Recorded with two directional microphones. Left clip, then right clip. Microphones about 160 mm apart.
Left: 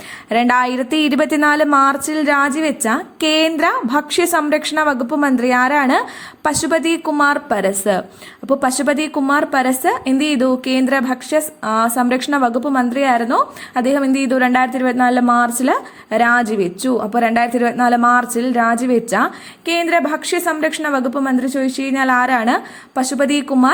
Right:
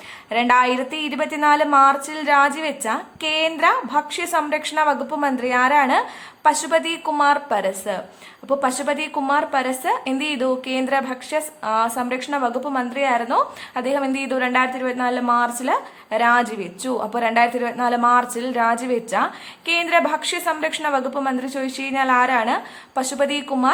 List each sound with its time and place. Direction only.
0.3 s speech: 30° left (ahead or behind)